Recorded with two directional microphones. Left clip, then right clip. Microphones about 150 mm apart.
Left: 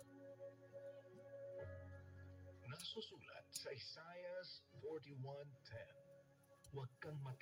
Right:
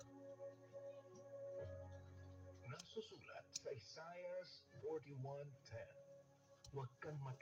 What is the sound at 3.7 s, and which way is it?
Speech, 35° left (ahead or behind).